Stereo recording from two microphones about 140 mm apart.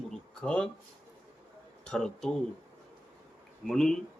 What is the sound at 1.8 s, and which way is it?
Speech, 5° left (ahead or behind).